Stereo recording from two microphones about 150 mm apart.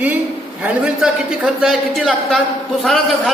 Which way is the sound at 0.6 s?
5° right (ahead or behind).